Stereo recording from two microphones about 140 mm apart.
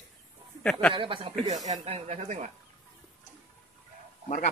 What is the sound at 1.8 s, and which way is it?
Speech, 50° right (ahead or behind).